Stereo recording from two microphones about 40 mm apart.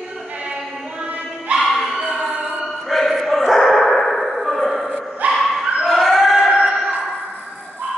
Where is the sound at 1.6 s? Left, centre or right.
Centre.